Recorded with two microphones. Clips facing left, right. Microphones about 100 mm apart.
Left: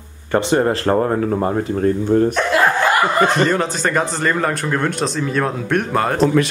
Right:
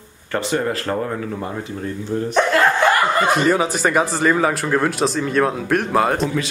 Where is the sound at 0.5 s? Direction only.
35° left (ahead or behind); by 2.2 s 50° left (ahead or behind).